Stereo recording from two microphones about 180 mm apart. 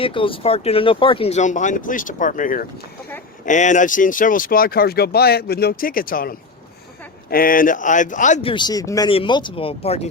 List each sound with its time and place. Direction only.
0.0 s speech: 30° left (ahead or behind); by 8.4 s 45° left (ahead or behind)
8.4 s speech: 30° left (ahead or behind)